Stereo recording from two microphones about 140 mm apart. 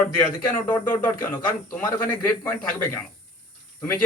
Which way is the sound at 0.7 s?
10° left (ahead or behind).